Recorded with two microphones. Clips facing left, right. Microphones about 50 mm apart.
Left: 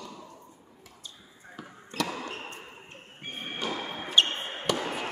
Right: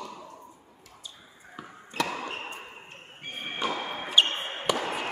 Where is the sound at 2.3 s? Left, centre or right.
Right.